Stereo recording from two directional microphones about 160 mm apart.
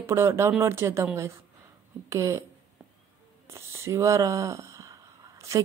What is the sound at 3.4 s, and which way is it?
A woman's voice, 15° right (ahead or behind).